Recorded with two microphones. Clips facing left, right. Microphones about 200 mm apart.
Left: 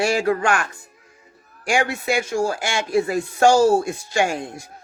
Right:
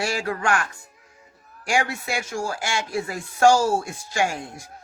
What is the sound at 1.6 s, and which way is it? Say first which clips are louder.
Speech: left 4 dB; 20° left (ahead or behind).